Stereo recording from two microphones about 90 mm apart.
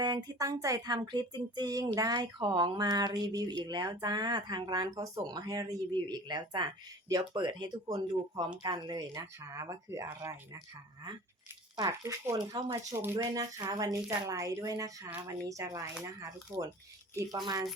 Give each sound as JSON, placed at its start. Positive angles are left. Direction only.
{"t": 0.0, "sound": "speech", "side_deg": -50}
{"t": 0.9, "sound": "speech", "side_deg": -60}
{"t": 5.9, "sound": "speech", "side_deg": -55}
{"t": 7.9, "sound": "speech", "side_deg": -45}
{"t": 9.1, "sound": "speech", "side_deg": -35}
{"t": 11.9, "sound": "speech", "side_deg": -30}
{"t": 12.5, "sound": "speech", "side_deg": -50}
{"t": 13.0, "sound": "speech", "side_deg": -25}
{"t": 13.3, "sound": "speech", "side_deg": -40}
{"t": 17.3, "sound": "speech", "side_deg": -50}